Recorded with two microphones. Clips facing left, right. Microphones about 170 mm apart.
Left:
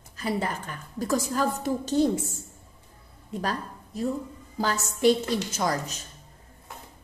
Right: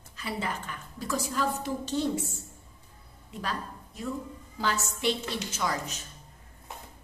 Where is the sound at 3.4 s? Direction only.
40° left (ahead or behind).